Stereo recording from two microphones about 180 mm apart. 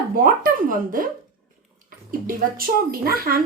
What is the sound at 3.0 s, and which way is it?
Speech, 55° right (ahead or behind).